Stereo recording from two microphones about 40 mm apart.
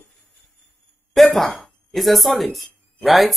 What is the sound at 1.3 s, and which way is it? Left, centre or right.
Speech, centre.